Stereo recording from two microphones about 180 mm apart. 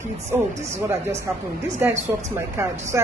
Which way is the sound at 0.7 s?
15° right (ahead or behind).